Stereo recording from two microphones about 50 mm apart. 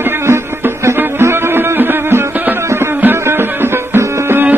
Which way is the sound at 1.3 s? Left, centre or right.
Right.